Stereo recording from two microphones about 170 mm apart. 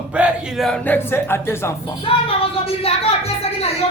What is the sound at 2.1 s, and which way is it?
Speech, 35° left (ahead or behind).